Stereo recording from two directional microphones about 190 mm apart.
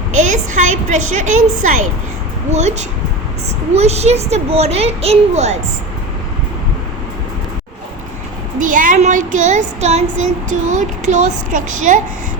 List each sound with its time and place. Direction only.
0.1 s a woman's voice: 40° right (ahead or behind)
1.6 s child singing: 40° right (ahead or behind)
3.8 s child singing: 35° right (ahead or behind)
8.5 s child singing: 45° right (ahead or behind)